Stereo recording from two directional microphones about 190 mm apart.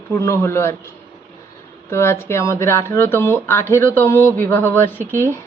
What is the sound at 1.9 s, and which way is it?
Speech, 15° left (ahead or behind).